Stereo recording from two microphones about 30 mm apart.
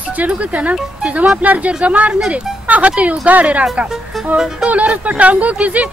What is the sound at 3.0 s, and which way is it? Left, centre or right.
Speech, right.